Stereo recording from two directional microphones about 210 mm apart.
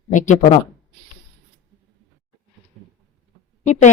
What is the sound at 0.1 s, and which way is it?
Speech, 35° left (ahead or behind).